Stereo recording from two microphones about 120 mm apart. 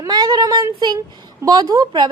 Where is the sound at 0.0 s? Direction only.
35° right (ahead or behind).